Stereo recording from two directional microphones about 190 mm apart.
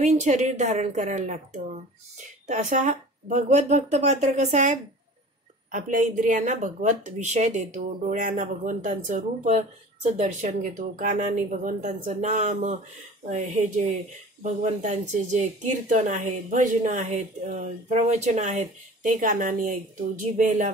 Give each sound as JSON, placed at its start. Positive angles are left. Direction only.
{"t": 0.0, "sound": "a woman's voice", "side_deg": -40}